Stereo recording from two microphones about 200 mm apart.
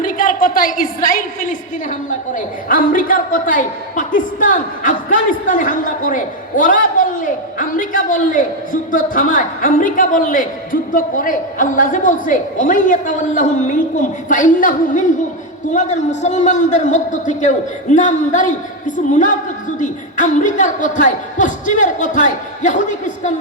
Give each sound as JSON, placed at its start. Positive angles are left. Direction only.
{"t": 0.0, "sound": "a woman's voice", "side_deg": 45}